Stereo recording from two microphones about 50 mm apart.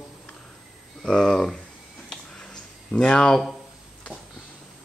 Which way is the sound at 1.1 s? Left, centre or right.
Centre.